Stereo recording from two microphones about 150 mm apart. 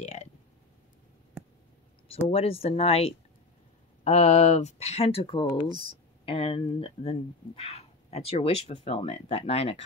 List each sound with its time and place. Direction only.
0.0 s speech: 50° left (ahead or behind)
2.2 s speech: 40° left (ahead or behind)